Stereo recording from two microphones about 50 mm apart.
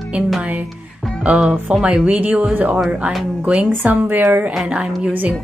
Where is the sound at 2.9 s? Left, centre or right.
Right.